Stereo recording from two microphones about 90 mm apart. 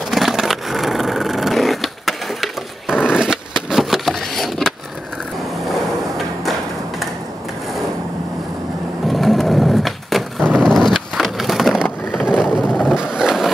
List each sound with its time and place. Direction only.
0.1 s vehicle: centre (ahead or behind)
9.0 s wood: centre (ahead or behind)
12.3 s vehicle: 5° right (ahead or behind)
13.1 s a sound: 5° right (ahead or behind)